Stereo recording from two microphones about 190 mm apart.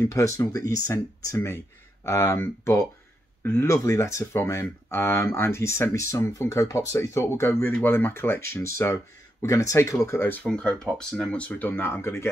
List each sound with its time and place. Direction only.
0.0 s speech: 15° left (ahead or behind)